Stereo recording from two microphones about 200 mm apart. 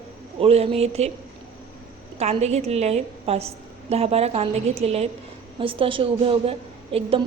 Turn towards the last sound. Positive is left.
turn(degrees=-30)  # may be behind; listen again after turning